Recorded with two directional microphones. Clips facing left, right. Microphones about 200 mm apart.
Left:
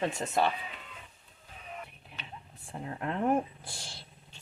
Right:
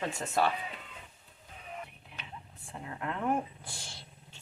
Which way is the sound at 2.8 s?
35° left (ahead or behind).